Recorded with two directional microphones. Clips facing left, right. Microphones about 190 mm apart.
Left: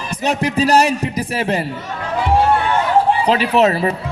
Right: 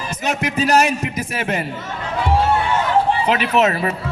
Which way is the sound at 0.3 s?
35° left (ahead or behind).